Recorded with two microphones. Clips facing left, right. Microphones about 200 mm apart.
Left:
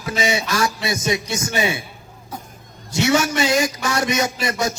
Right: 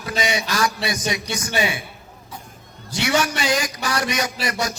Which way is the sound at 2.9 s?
25° left (ahead or behind).